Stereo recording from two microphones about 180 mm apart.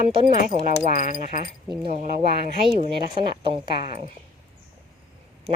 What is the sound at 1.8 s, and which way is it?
Speech, 35° right (ahead or behind).